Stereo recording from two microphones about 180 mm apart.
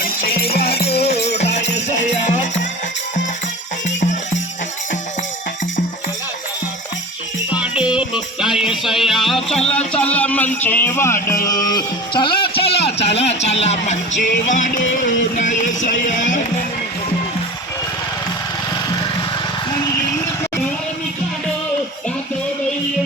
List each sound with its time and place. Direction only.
0.5 s music: 60° left (ahead or behind)
1.4 s music: 40° left (ahead or behind)
7.6 s music: 5° right (ahead or behind); by 12.8 s 30° left (ahead or behind)
13.0 s speech: 35° left (ahead or behind)
13.4 s music: 35° left (ahead or behind)